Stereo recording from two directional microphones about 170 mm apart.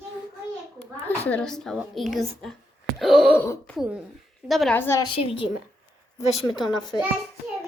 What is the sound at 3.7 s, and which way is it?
A child's voice, 5° right (ahead or behind).